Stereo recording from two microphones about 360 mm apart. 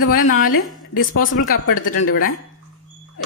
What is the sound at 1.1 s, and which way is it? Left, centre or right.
Speech, left.